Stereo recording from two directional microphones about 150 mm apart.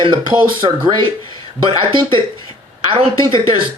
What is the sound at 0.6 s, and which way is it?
Speech, 30° right (ahead or behind).